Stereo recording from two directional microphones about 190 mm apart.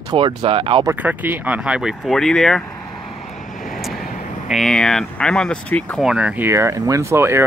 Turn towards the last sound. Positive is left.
turn(degrees=-15)  # may be behind; listen again after turning